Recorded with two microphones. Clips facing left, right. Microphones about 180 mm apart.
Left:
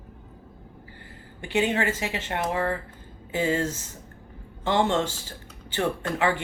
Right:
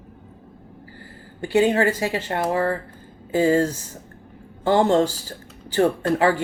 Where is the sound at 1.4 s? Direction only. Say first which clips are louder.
Right 7 dB; 40° right (ahead or behind).